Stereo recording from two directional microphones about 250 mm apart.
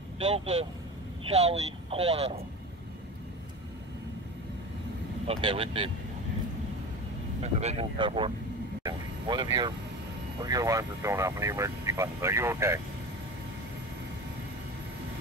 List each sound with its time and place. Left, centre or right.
0.2 s speech: right
5.2 s speech: right
7.6 s speech: right